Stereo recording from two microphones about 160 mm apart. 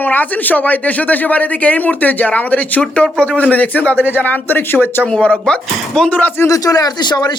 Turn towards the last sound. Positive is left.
turn(degrees=25)  # may be behind; listen again after turning